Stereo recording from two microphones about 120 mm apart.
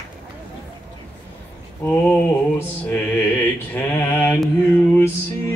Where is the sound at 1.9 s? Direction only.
15° left (ahead or behind).